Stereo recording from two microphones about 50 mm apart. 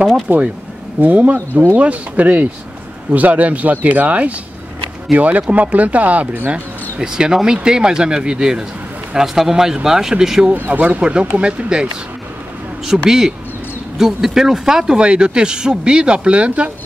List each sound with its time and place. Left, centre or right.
0.3 s speech: right
1.0 s speech: right
7.0 s speech: centre
10.7 s speech: right
12.9 s speech: centre; by 16.7 s right